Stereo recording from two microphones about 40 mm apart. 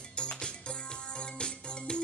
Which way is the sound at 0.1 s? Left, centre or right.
Left.